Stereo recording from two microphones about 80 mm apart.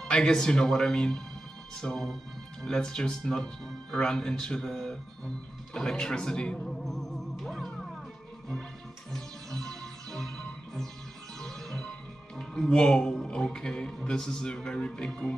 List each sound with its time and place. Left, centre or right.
0.0 s speech: centre
5.8 s music: centre
9.1 s music: centre
12.4 s speech: centre